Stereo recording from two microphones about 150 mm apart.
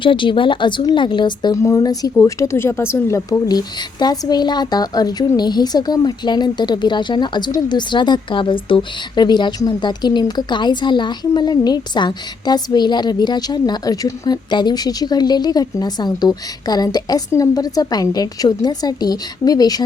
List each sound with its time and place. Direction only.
0.0 s a woman's voice: 35° left (ahead or behind)